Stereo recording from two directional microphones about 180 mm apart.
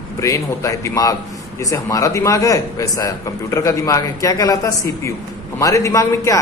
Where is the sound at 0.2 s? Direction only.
15° left (ahead or behind).